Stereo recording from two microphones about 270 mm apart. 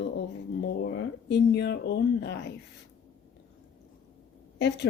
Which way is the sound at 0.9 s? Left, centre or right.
Left.